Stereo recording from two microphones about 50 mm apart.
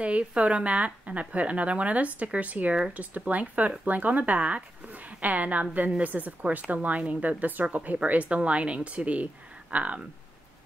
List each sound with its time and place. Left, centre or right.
0.0 s speech: right